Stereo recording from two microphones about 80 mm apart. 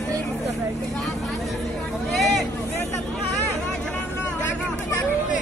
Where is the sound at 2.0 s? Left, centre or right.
Centre.